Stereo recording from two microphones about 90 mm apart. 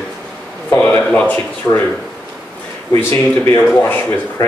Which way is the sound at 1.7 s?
30° left (ahead or behind).